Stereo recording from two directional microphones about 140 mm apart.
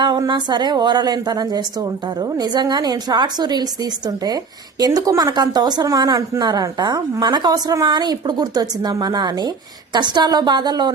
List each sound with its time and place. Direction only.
0.0 s a woman's voice: 35° right (ahead or behind)